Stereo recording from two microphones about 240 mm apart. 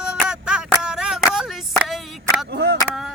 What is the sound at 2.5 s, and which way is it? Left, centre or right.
Speech, right.